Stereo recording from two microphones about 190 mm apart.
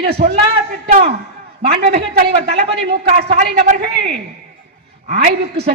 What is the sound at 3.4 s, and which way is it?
Speech, 45° right (ahead or behind).